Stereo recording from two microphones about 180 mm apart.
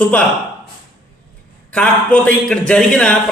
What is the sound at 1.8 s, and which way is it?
A man's voice, 5° left (ahead or behind).